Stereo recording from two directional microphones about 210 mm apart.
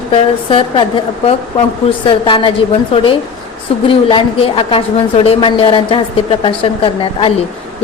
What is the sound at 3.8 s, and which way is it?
A woman's voice, 25° left (ahead or behind).